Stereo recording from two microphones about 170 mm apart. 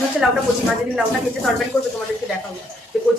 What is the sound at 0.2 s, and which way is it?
Speech, 5° right (ahead or behind).